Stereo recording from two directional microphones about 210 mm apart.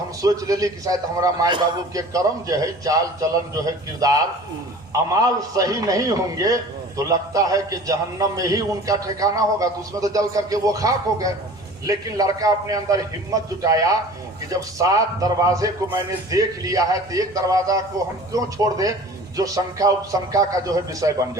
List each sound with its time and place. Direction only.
0.2 s a man's voice: 15° right (ahead or behind)